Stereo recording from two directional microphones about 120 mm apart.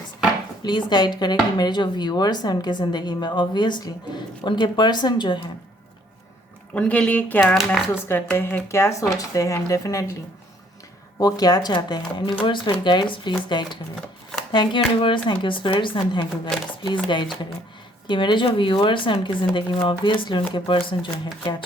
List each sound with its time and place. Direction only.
0.6 s speech: 40° left (ahead or behind)
6.7 s speech: 10° left (ahead or behind)
7.4 s speech: centre (ahead or behind)
8.0 s speech: 20° left (ahead or behind)
11.2 s speech: 30° left (ahead or behind)